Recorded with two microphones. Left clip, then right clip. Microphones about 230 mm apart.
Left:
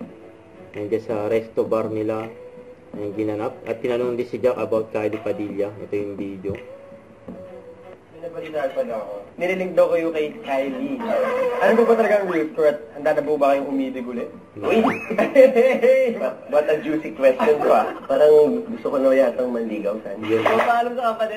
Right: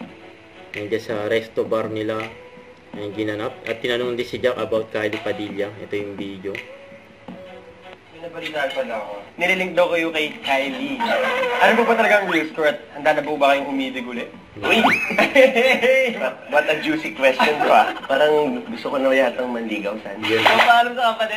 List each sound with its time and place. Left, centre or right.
0.7 s speech: centre
1.1 s speech: right
1.7 s a man's voice: right
8.4 s speech: centre